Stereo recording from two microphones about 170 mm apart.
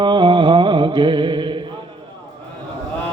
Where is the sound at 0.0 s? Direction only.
25° right (ahead or behind).